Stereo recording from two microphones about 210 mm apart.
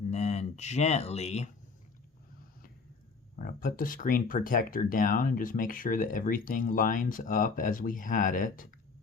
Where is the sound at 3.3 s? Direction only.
40° left (ahead or behind).